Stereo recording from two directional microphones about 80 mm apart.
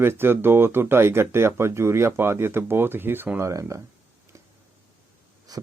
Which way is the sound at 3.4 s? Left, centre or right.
Right.